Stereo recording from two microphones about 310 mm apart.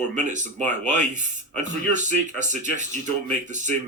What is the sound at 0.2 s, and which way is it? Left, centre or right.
Speech, right.